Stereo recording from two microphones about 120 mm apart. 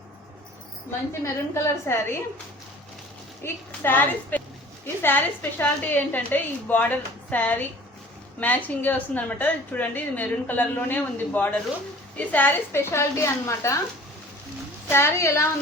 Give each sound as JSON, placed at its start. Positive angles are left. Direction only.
{"t": 1.2, "sound": "a woman's voice", "side_deg": 25}
{"t": 3.4, "sound": "a woman's voice", "side_deg": 15}
{"t": 14.8, "sound": "a woman's voice", "side_deg": 20}